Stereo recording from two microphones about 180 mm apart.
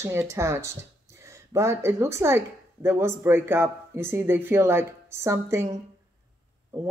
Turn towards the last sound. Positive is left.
turn(degrees=-15)  # may be behind; listen again after turning